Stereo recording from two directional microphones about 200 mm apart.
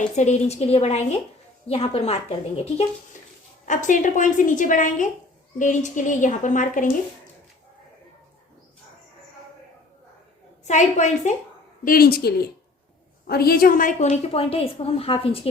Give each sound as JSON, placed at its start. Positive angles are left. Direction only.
{"t": 0.2, "sound": "a woman's voice", "side_deg": 35}
{"t": 10.7, "sound": "a woman's voice", "side_deg": 35}
{"t": 11.9, "sound": "a woman's voice", "side_deg": 50}